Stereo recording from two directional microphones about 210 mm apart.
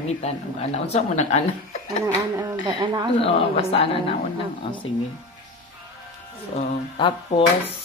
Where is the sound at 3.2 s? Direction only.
25° left (ahead or behind).